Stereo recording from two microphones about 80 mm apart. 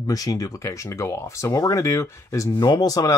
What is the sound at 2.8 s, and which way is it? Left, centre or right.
Speech, left.